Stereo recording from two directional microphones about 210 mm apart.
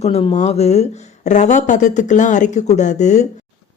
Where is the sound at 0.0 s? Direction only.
25° left (ahead or behind).